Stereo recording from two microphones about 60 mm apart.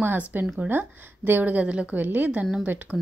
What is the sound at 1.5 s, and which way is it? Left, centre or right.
Speech, right.